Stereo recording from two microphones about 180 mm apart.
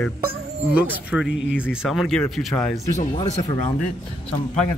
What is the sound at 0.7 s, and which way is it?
Speech, 5° right (ahead or behind).